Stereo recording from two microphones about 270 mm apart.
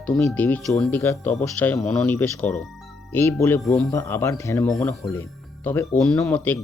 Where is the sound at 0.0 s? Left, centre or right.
Centre.